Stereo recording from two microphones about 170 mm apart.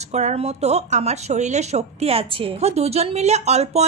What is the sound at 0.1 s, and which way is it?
Speech, 40° right (ahead or behind).